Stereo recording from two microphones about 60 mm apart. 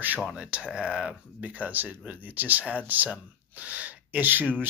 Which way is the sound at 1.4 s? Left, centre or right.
Right.